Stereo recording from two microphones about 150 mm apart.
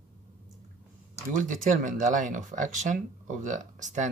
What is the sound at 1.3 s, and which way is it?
Speech, 60° right (ahead or behind).